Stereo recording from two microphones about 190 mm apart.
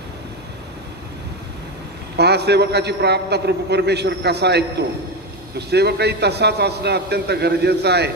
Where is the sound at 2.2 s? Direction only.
60° right (ahead or behind).